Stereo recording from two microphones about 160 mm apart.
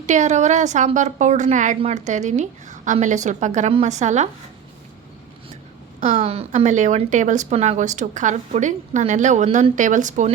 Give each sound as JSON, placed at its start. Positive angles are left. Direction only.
{"t": 0.0, "sound": "speech", "side_deg": -50}
{"t": 6.0, "sound": "speech", "side_deg": -45}